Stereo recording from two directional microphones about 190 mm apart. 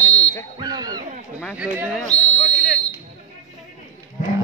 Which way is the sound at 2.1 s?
35° left (ahead or behind).